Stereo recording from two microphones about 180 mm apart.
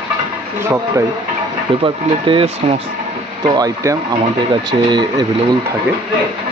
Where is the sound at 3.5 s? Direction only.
20° right (ahead or behind).